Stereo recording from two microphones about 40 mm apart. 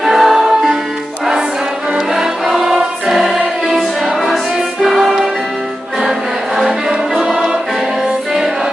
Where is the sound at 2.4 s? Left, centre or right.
Centre.